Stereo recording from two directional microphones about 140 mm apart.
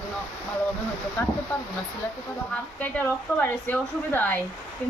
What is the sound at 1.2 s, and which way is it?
Speech, 20° left (ahead or behind).